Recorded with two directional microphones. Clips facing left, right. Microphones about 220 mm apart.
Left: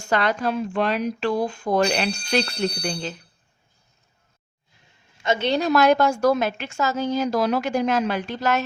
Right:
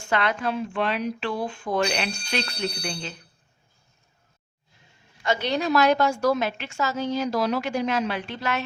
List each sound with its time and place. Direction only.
0.0 s a woman's voice: 40° left (ahead or behind)
5.1 s a woman's voice: 25° left (ahead or behind)
5.5 s a woman's voice: 45° left (ahead or behind)